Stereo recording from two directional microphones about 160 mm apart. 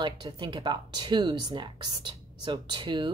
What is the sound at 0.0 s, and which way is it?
Speech, 30° right (ahead or behind).